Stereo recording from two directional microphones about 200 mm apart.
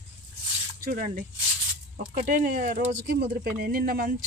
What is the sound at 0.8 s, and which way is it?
Speech, 45° right (ahead or behind).